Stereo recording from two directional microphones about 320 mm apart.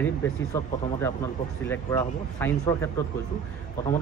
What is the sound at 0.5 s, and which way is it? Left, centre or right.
Speech, centre.